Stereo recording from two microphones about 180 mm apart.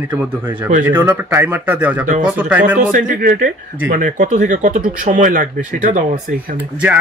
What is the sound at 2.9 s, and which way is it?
Speech, 50° right (ahead or behind).